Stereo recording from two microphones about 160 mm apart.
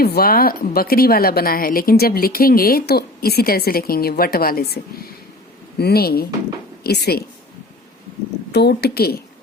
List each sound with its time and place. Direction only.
0.0 s a woman's voice: 70° left (ahead or behind)
8.5 s a woman's voice: 90° left